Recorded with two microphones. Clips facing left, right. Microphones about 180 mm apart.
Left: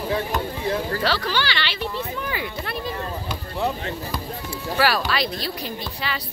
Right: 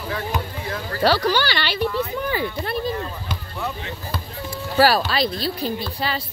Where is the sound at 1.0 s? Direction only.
40° right (ahead or behind).